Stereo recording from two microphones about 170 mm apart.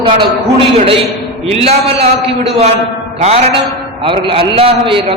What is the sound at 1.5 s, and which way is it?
A man's voice, 35° right (ahead or behind).